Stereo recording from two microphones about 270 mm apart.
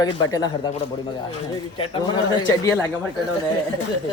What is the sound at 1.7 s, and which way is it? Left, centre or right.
A man's voice, centre.